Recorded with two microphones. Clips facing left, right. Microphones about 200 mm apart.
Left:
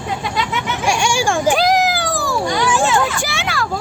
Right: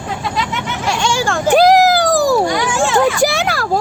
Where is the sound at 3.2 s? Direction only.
40° right (ahead or behind).